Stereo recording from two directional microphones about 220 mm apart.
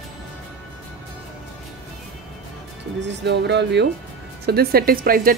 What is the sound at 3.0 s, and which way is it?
A woman's voice, 50° right (ahead or behind).